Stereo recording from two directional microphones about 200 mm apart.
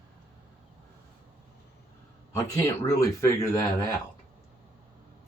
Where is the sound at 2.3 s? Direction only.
10° left (ahead or behind).